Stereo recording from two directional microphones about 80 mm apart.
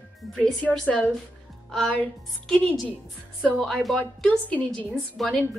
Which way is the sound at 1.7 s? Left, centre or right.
Centre.